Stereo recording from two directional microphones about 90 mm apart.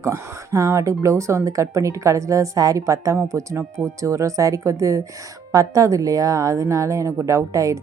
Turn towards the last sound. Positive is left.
turn(degrees=-35)  # may be behind; listen again after turning